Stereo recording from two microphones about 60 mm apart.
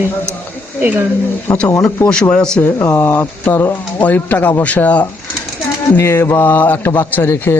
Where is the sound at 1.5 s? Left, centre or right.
Centre.